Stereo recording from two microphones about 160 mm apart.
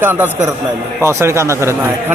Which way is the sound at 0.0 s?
15° right (ahead or behind).